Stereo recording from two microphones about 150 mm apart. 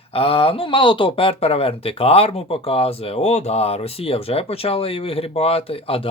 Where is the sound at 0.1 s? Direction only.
40° left (ahead or behind).